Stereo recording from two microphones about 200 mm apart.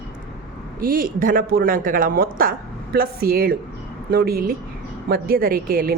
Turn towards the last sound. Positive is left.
turn(degrees=-45)  # may be behind; listen again after turning